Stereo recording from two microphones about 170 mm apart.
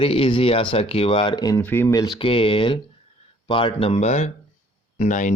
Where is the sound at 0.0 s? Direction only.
30° left (ahead or behind).